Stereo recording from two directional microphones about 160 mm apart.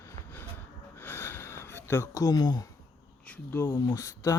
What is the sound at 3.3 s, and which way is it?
Speech, 15° left (ahead or behind).